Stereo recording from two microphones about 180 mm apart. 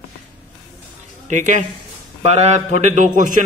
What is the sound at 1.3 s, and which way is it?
A man's voice, 45° right (ahead or behind).